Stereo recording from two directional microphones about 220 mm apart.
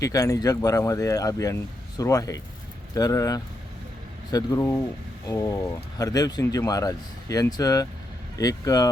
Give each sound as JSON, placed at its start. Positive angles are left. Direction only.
{"t": 0.0, "sound": "speech", "side_deg": 15}